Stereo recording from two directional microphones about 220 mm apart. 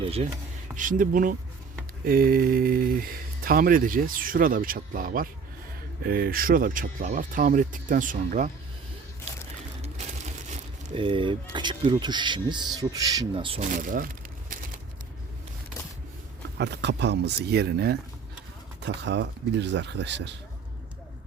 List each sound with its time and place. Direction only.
0.0 s speech: 25° right (ahead or behind)
0.8 s speech: 35° right (ahead or behind)
10.8 s speech: 25° right (ahead or behind); by 14.1 s 40° right (ahead or behind)
16.6 s speech: 50° right (ahead or behind)